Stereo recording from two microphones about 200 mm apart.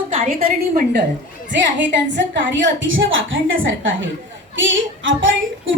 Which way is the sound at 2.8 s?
70° right (ahead or behind).